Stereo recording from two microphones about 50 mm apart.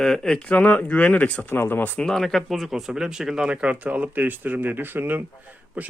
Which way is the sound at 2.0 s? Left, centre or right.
Centre.